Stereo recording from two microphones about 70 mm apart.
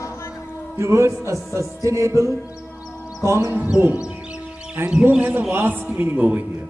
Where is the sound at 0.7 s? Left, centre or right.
Right.